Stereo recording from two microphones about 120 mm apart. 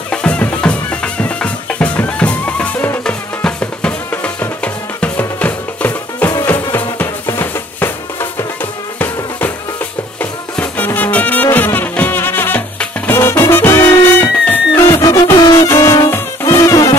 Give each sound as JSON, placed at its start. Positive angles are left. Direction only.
{"t": 0.1, "sound": "music", "side_deg": 10}
{"t": 6.4, "sound": "drum", "side_deg": 15}
{"t": 10.5, "sound": "music", "side_deg": 15}
{"t": 14.9, "sound": "music", "side_deg": 30}